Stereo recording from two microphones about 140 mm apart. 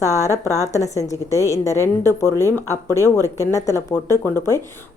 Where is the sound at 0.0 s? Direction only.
20° left (ahead or behind).